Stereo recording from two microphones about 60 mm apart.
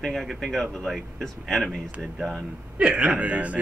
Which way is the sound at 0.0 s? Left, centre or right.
Centre.